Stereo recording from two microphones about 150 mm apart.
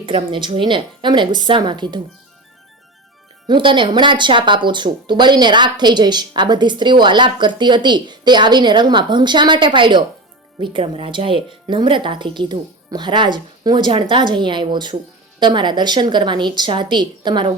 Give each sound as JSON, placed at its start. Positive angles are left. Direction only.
{"t": 0.0, "sound": "speech", "side_deg": -35}
{"t": 3.4, "sound": "speech", "side_deg": -35}